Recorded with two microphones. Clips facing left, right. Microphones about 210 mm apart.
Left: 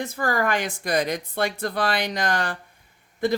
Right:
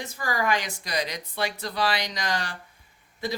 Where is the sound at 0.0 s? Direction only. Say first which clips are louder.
Left 4 dB; 55° left (ahead or behind).